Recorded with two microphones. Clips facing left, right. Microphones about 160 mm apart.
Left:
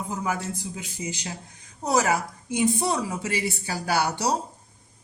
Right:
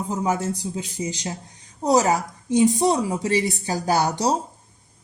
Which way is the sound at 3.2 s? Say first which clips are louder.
Right 6 dB; 40° right (ahead or behind).